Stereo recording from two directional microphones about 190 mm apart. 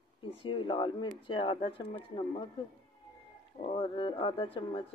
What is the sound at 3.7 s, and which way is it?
Speech, 25° left (ahead or behind).